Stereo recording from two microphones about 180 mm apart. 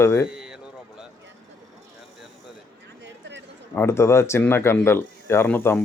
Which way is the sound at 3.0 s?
80° right.